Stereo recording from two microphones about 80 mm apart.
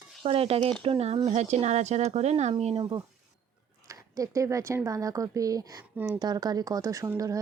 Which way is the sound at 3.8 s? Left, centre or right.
Right.